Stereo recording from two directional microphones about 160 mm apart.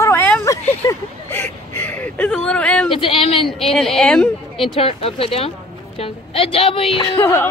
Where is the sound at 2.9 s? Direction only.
35° left (ahead or behind).